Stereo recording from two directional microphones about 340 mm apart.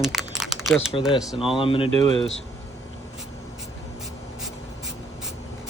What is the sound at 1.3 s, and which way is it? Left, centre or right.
Speech, centre.